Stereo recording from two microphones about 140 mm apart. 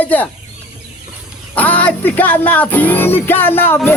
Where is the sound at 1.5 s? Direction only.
10° left (ahead or behind).